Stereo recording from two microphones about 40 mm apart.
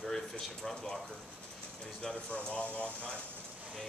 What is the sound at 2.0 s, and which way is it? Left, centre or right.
Speech, centre.